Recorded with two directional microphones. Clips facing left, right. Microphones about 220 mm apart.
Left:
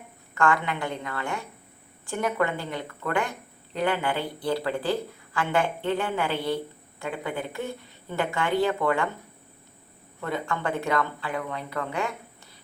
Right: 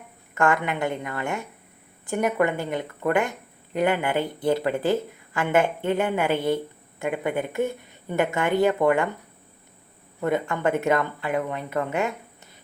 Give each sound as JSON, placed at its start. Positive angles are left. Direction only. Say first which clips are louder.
{"t": 0.3, "sound": "speech", "louder": "right 2 dB", "side_deg": -20}
{"t": 10.2, "sound": "speech", "louder": "right 5 dB", "side_deg": -20}